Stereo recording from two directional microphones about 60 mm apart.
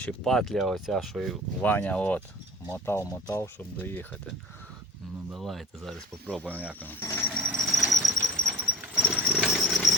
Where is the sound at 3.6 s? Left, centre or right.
Left.